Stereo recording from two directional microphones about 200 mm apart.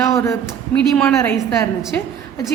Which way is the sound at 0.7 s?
5° left (ahead or behind).